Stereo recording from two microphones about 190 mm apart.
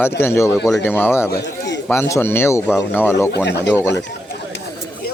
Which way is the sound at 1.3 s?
65° left (ahead or behind).